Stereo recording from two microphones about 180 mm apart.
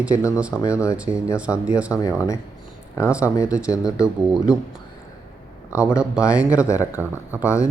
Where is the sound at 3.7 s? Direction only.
20° left (ahead or behind).